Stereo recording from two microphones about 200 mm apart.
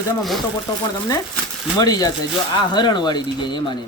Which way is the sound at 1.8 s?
20° left (ahead or behind).